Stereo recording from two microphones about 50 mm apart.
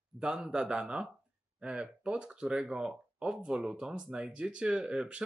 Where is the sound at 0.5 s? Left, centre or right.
Centre.